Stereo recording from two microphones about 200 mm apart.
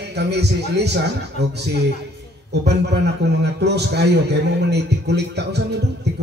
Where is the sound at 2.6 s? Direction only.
55° right (ahead or behind).